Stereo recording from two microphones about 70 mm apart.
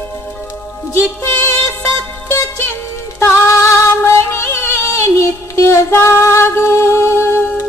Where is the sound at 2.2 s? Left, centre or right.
Left.